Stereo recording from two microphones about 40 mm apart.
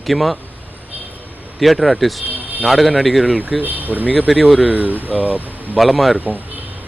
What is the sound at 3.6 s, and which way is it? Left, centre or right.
Speech, right.